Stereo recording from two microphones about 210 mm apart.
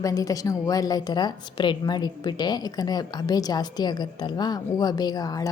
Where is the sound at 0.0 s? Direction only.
15° left (ahead or behind).